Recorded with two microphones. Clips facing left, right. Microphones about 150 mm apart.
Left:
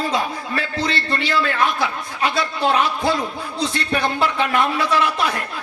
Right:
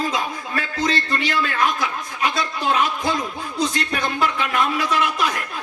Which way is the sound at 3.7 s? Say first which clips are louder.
Left 3 dB; 30° left (ahead or behind).